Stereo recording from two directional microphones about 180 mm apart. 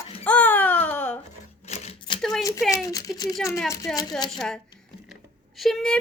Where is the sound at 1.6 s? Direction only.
35° left (ahead or behind).